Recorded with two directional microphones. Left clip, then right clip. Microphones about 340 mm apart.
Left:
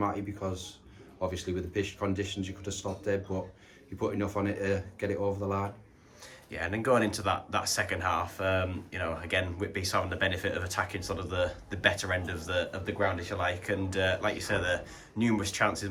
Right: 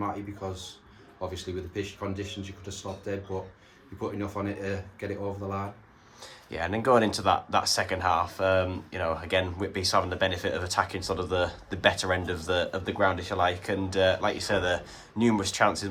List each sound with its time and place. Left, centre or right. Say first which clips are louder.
0.0 s speech: left 1 dB; centre
6.5 s speech: right 4 dB; centre